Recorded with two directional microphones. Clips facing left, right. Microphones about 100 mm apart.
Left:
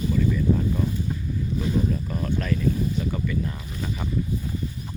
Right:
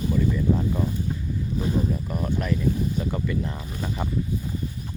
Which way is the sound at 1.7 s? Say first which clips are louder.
Left 1 dB; 20° right (ahead or behind).